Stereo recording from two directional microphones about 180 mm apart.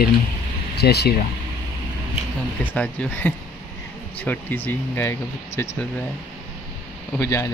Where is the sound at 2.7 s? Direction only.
10° left (ahead or behind).